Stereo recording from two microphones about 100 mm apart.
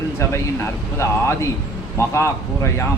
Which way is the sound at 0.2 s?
25° left (ahead or behind).